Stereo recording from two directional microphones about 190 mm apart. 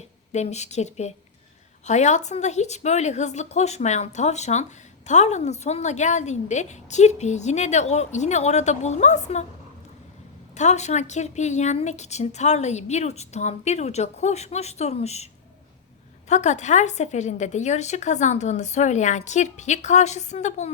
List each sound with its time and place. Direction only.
0.3 s a woman's voice: 35° left (ahead or behind)
10.5 s a woman's voice: 40° left (ahead or behind)
16.3 s a woman's voice: 40° left (ahead or behind)